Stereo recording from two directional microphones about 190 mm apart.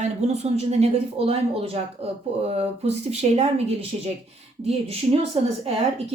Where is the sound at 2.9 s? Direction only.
35° right (ahead or behind).